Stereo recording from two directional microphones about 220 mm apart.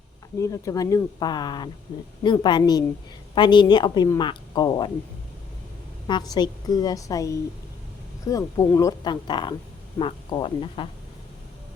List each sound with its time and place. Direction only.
0.3 s a woman's voice: 15° left (ahead or behind)
6.1 s a woman's voice: 20° left (ahead or behind)